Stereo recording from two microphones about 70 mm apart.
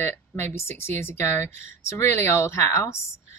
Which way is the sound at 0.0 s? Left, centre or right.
Left.